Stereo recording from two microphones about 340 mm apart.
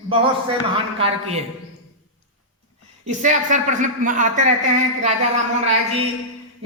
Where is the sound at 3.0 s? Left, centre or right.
Right.